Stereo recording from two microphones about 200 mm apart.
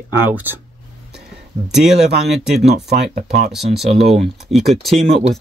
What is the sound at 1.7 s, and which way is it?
Speech, centre (ahead or behind).